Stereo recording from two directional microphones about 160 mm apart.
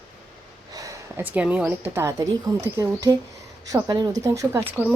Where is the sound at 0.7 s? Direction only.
20° right (ahead or behind).